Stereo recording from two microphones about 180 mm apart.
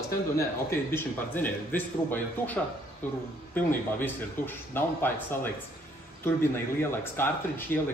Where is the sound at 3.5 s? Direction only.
10° left (ahead or behind).